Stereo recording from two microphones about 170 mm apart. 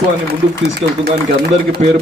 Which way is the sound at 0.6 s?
75° right (ahead or behind).